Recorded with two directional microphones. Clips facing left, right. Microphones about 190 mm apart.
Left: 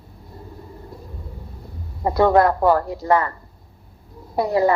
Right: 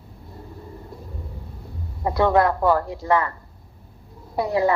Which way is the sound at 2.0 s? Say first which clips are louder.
Left 3 dB; 40° left (ahead or behind).